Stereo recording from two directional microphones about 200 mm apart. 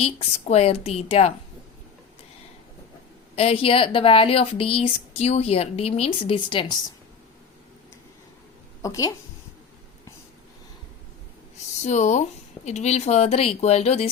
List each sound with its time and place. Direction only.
0.0 s a woman's voice: 30° left (ahead or behind)
3.3 s a woman's voice: 30° left (ahead or behind)
8.8 s a woman's voice: 15° left (ahead or behind)
11.8 s speech: 35° left (ahead or behind)